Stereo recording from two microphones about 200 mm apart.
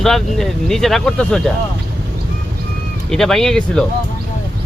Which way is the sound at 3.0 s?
Centre (ahead or behind).